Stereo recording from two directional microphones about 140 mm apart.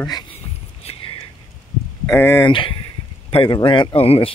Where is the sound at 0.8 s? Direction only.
45° left (ahead or behind).